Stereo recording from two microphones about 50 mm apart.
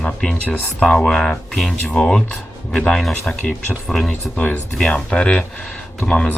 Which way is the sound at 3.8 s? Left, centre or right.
Centre.